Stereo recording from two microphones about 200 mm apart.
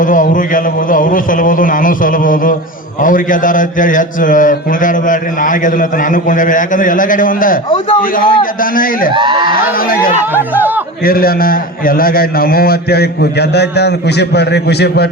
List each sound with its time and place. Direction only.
0.0 s a man's voice: 40° left (ahead or behind)
9.1 s speech: 25° right (ahead or behind)
9.7 s a man's voice: 45° left (ahead or behind)
10.3 s speech: 10° right (ahead or behind)
11.0 s a man's voice: 45° left (ahead or behind)